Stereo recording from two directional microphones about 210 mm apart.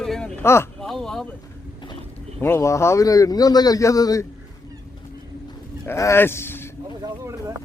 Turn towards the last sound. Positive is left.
turn(degrees=10)  # may be behind; listen again after turning